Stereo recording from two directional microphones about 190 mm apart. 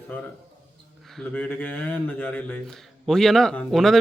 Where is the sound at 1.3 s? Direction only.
10° left (ahead or behind).